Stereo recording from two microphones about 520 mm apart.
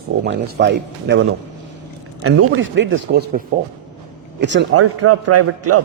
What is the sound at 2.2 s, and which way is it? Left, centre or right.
Speech, right.